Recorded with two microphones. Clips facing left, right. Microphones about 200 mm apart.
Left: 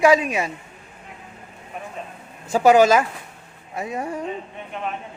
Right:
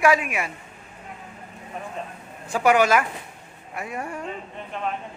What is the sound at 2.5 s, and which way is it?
A man's voice, 25° left (ahead or behind).